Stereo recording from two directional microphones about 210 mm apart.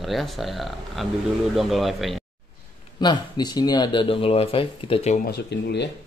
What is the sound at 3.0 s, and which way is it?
Speech, 20° left (ahead or behind).